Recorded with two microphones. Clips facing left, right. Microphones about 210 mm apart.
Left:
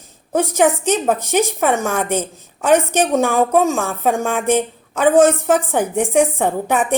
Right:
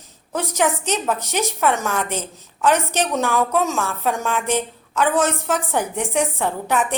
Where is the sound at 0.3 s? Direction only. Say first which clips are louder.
Left 6 dB; 50° left (ahead or behind).